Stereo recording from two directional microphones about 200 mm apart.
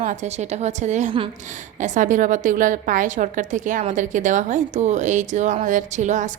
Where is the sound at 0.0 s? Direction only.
40° right (ahead or behind).